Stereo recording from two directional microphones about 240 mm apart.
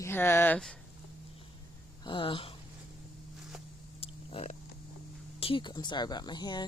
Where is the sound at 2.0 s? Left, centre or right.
Left.